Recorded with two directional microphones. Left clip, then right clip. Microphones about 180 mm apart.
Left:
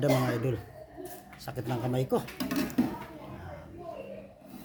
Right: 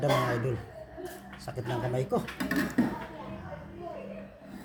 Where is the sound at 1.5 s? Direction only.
55° left (ahead or behind).